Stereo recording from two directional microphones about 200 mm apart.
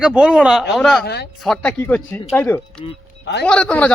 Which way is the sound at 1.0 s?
55° left (ahead or behind).